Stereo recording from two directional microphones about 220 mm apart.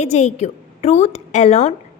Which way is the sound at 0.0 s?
30° left (ahead or behind).